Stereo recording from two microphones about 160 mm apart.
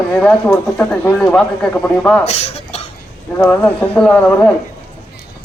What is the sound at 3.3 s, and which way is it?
A man's voice, 10° left (ahead or behind).